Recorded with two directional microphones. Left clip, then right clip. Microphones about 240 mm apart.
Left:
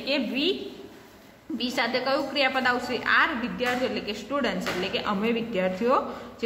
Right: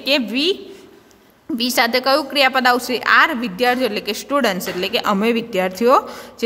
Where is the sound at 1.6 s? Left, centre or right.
Right.